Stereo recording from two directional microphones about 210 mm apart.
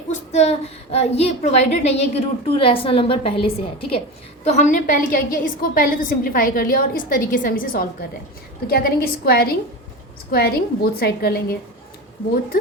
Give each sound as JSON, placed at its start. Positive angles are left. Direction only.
{"t": 0.1, "sound": "a woman's voice", "side_deg": 30}